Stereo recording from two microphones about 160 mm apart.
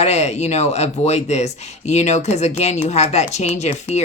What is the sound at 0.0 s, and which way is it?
Speech, 45° left (ahead or behind).